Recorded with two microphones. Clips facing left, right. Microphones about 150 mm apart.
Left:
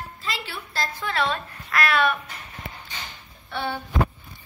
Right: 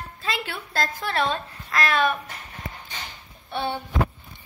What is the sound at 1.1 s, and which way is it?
Speech, 25° right (ahead or behind).